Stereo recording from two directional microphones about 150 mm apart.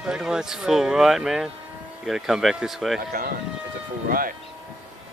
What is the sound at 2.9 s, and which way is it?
Speech, 90° right.